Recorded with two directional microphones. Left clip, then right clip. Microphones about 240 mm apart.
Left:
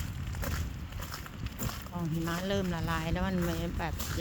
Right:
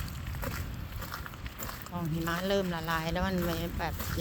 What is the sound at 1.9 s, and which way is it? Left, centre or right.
Speech, centre.